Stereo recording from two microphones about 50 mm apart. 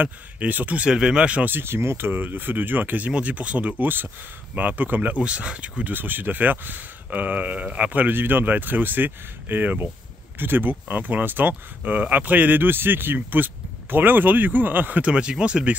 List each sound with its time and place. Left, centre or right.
0.0 s speech: right
0.8 s speech: centre
1.4 s speech: right
3.8 s speech: right
5.2 s speech: right
5.9 s speech: right
15.0 s speech: right